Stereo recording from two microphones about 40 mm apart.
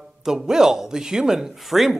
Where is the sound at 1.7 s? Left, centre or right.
Centre.